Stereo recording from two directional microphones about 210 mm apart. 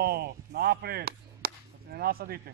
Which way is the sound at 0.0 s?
50° right (ahead or behind).